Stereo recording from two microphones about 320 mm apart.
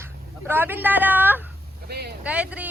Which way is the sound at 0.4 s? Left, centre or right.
Centre.